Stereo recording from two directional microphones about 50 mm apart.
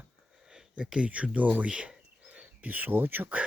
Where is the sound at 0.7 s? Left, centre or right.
Centre.